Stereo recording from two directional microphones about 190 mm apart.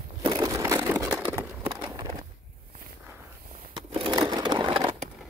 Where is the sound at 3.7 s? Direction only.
25° right (ahead or behind).